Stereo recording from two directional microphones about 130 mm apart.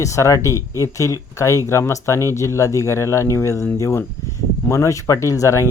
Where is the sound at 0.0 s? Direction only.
25° left (ahead or behind).